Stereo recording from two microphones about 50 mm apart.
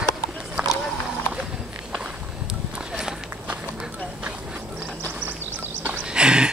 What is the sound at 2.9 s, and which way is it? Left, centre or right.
Walk, centre.